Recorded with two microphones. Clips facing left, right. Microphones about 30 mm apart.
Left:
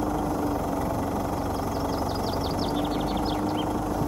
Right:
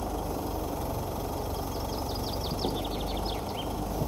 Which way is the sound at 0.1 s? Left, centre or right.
Centre.